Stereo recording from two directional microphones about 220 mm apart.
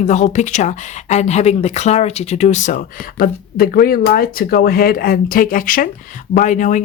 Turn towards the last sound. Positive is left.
turn(degrees=35)  # may be behind; listen again after turning